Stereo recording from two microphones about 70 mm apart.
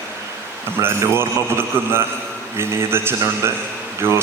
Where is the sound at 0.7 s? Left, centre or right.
Right.